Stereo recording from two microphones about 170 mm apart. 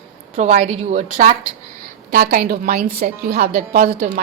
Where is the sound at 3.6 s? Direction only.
45° right (ahead or behind).